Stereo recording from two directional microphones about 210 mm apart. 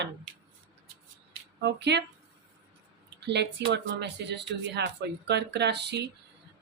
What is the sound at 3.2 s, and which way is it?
Speech, 55° right (ahead or behind).